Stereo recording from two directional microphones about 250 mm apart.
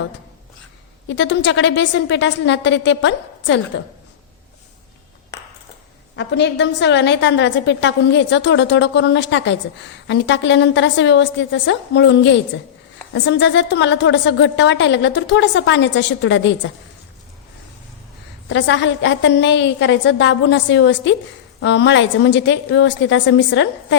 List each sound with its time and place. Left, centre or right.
1.0 s a woman's voice: left
6.1 s a woman's voice: left
18.4 s a woman's voice: left